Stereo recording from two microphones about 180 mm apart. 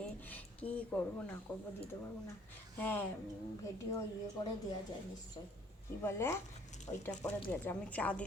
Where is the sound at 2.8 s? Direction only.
10° left (ahead or behind).